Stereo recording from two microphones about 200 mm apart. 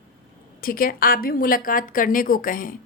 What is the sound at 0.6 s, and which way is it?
A woman's voice, 45° left (ahead or behind).